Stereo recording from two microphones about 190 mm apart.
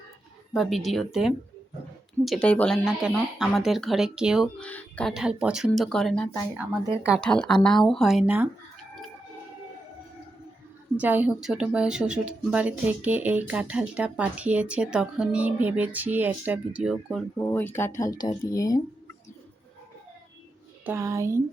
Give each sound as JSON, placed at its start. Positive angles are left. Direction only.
{"t": 0.5, "sound": "speech", "side_deg": 0}
{"t": 4.6, "sound": "speech", "side_deg": 5}
{"t": 10.9, "sound": "speech", "side_deg": -10}
{"t": 17.5, "sound": "speech", "side_deg": 10}
{"t": 20.8, "sound": "speech", "side_deg": -15}